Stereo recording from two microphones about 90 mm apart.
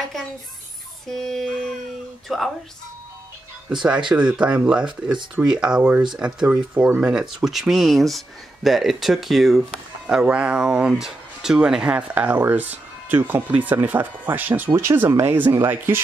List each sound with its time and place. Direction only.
1.0 s speech: centre (ahead or behind)
4.1 s speech: 10° right (ahead or behind)
6.5 s speech: 20° right (ahead or behind); by 9.8 s centre (ahead or behind)
10.0 s speech: 15° right (ahead or behind)